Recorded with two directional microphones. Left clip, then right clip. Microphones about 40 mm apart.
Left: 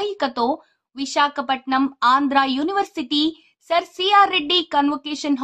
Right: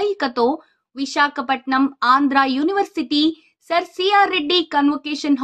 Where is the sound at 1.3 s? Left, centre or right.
Right.